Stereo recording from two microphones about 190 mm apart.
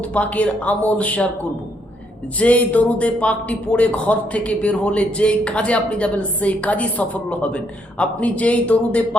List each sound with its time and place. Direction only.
0.0 s speech: 5° left (ahead or behind)
2.4 s speech: 5° left (ahead or behind)